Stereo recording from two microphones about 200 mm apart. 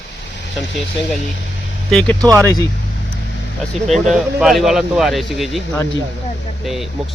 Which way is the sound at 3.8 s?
35° right (ahead or behind).